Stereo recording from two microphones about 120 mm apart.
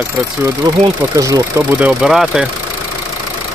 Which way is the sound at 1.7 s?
10° right (ahead or behind).